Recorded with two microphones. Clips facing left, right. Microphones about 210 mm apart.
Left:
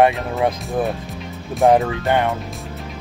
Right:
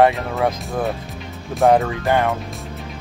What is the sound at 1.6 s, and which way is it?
Speech, 15° left (ahead or behind).